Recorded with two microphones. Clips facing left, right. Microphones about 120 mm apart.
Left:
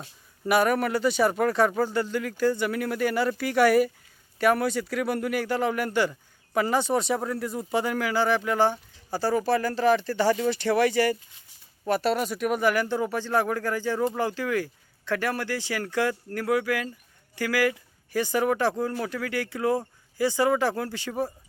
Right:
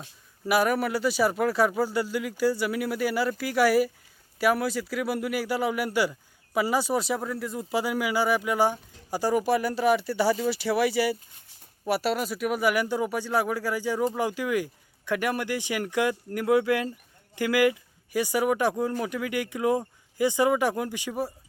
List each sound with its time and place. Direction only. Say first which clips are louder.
0.0 s speech: left 2 dB; centre (ahead or behind)